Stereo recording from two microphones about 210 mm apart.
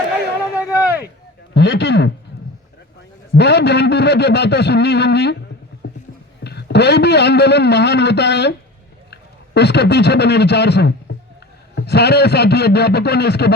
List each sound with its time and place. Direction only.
0.5 s a sound: 15° left (ahead or behind)
1.5 s a man's voice: 55° left (ahead or behind)
3.3 s a man's voice: 55° left (ahead or behind)
5.8 s a sound: 55° left (ahead or behind)
6.4 s a man's voice: 50° left (ahead or behind)
9.6 s a man's voice: 50° left (ahead or behind)